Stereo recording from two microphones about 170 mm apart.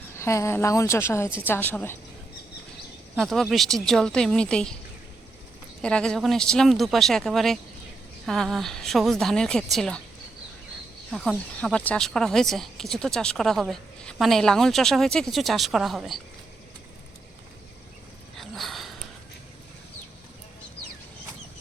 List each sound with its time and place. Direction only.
0.2 s a woman's voice: 15° left (ahead or behind)
3.2 s speech: centre (ahead or behind)
5.8 s speech: 5° left (ahead or behind)
11.1 s speech: 5° left (ahead or behind)
18.3 s a sound: centre (ahead or behind)